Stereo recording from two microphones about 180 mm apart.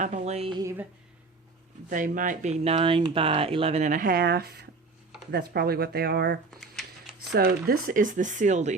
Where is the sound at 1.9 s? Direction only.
50° right (ahead or behind).